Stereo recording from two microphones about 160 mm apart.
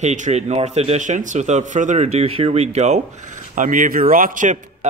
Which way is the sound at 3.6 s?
55° right (ahead or behind).